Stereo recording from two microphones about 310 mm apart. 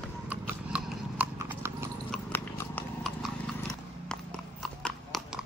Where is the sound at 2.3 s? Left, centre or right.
Centre.